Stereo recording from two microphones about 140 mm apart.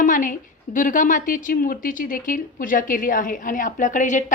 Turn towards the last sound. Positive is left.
turn(degrees=65)  # may be behind; listen again after turning